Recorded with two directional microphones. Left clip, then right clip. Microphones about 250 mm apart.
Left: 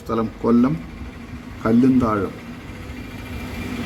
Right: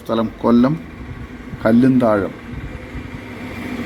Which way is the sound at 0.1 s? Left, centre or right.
Centre.